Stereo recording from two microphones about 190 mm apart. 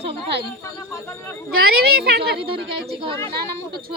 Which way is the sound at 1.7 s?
55° right (ahead or behind).